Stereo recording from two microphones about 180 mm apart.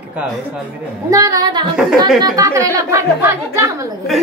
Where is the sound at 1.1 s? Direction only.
20° right (ahead or behind).